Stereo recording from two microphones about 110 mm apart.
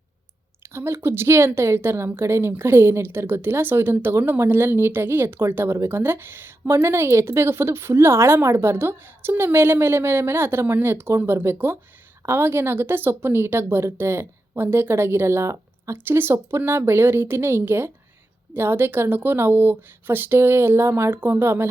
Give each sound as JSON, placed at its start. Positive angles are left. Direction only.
{"t": 0.7, "sound": "a woman's voice", "side_deg": -25}